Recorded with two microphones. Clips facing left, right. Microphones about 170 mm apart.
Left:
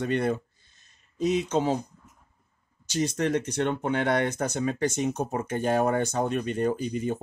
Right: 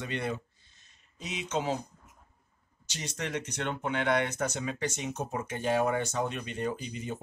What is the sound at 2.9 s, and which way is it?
Speech, 45° left (ahead or behind).